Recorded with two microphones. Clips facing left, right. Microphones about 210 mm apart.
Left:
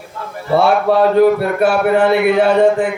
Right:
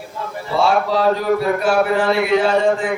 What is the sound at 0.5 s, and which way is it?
A man's voice, 60° left (ahead or behind).